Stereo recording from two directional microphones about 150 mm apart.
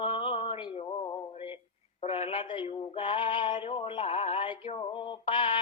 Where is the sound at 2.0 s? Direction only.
40° left (ahead or behind).